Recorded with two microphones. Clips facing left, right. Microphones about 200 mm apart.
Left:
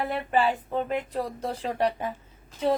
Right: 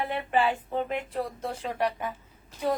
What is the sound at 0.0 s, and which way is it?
Speech, 40° left (ahead or behind).